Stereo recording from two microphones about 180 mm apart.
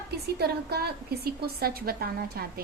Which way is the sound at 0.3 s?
60° right (ahead or behind).